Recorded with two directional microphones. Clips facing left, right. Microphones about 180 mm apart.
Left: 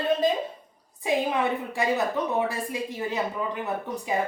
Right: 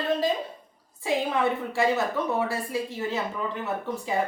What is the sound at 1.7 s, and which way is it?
Speech, 15° left (ahead or behind).